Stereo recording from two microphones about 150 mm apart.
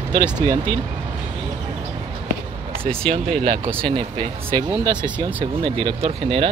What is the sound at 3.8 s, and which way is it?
Speech, 35° right (ahead or behind).